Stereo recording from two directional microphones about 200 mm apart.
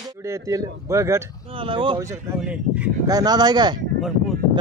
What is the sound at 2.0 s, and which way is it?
Speech, 5° right (ahead or behind).